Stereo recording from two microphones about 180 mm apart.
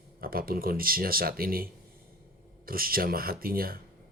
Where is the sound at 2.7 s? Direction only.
55° right (ahead or behind).